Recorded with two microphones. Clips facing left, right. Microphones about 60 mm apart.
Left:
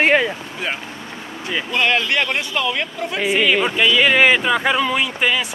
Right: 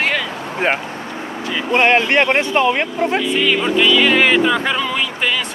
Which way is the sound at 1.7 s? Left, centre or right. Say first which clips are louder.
Right 5 dB; right.